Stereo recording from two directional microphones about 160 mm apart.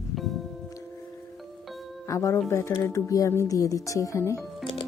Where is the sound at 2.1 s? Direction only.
20° left (ahead or behind).